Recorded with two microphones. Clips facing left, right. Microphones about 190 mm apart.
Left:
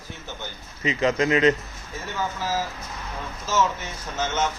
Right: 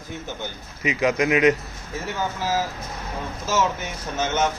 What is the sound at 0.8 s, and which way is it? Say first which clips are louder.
Speech: right 1 dB; 10° right (ahead or behind).